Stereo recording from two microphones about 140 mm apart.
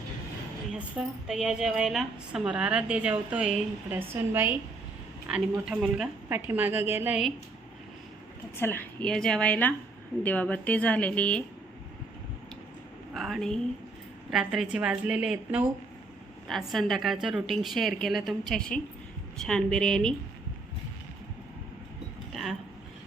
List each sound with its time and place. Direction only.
0.7 s a woman's voice: 5° right (ahead or behind)
8.5 s a woman's voice: 15° left (ahead or behind)
13.1 s a woman's voice: centre (ahead or behind)
22.3 s a sound: centre (ahead or behind)